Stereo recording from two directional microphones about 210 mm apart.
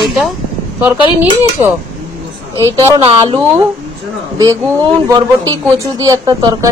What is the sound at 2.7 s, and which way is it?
A woman's voice, 15° right (ahead or behind).